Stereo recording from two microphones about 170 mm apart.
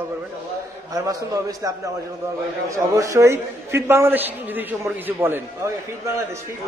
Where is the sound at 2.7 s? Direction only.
20° right (ahead or behind).